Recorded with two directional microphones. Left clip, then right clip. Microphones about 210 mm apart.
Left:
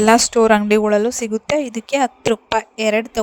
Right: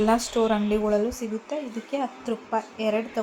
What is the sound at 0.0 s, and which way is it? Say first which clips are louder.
Speech: left 10 dB; 50° left (ahead or behind).